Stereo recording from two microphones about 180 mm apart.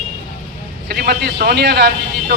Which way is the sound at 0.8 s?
60° right (ahead or behind).